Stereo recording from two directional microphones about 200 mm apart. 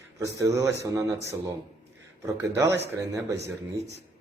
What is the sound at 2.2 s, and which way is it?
A man's voice, 15° right (ahead or behind).